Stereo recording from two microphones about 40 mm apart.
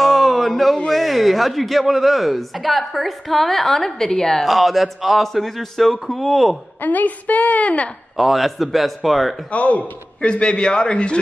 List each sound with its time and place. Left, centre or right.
0.0 s a sound: centre
0.8 s speech: centre
4.5 s speech: centre
6.8 s a woman's voice: left
8.2 s speech: centre
9.5 s a woman's voice: left
10.4 s a man's voice: left